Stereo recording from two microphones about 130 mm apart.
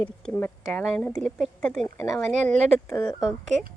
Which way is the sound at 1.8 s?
15° left (ahead or behind).